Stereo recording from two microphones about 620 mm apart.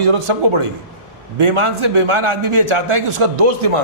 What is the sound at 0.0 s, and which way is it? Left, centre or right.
Speech, right.